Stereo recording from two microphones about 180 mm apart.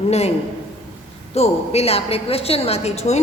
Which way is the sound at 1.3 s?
35° left (ahead or behind).